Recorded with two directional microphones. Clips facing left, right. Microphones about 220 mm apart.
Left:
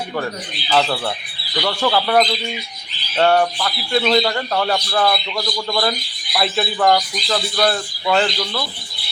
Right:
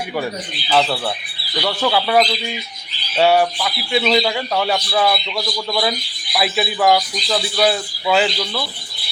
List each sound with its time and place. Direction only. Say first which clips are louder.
0.7 s a man's voice: right 1 dB; 5° right (ahead or behind)